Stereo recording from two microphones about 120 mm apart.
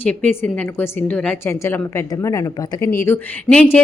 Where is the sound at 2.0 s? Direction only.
25° left (ahead or behind).